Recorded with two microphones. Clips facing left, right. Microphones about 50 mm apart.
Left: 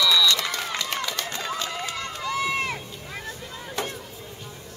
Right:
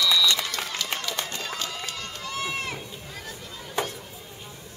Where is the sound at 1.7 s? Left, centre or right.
Left.